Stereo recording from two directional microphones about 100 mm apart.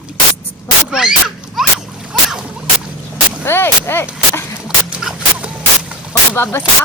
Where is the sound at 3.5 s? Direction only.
25° left (ahead or behind).